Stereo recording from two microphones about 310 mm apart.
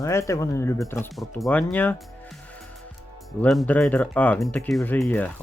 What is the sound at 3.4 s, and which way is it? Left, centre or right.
Speech, centre.